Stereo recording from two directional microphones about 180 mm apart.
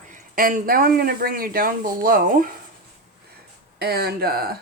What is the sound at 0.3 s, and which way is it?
Speech, 50° right (ahead or behind).